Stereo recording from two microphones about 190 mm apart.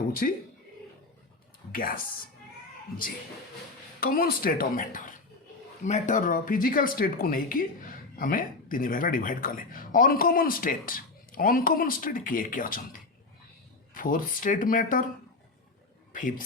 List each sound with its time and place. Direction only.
0.2 s speech: 50° left (ahead or behind)
1.7 s speech: 45° left (ahead or behind)
4.0 s speech: 50° left (ahead or behind)
13.9 s speech: 45° left (ahead or behind)